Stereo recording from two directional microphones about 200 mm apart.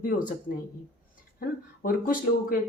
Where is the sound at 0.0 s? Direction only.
40° left (ahead or behind).